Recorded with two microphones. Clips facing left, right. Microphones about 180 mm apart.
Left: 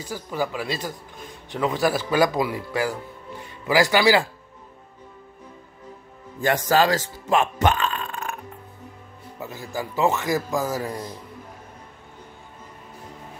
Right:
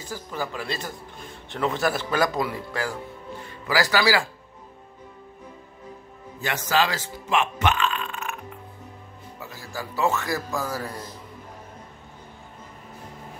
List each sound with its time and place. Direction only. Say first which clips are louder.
0.1 s a man's voice: left 4 dB; 15° left (ahead or behind)
6.4 s speech: left 5 dB; 45° left (ahead or behind)
9.4 s a man's voice: left 5 dB; 20° left (ahead or behind)